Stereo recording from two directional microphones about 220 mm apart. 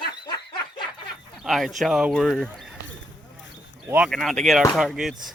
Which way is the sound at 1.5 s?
Centre (ahead or behind).